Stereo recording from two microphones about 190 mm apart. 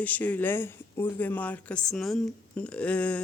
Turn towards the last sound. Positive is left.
turn(degrees=5)  # may be behind; listen again after turning